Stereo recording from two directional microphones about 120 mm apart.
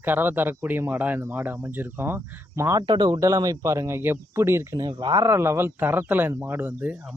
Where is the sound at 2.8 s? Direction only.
40° right (ahead or behind); by 4.8 s 20° right (ahead or behind).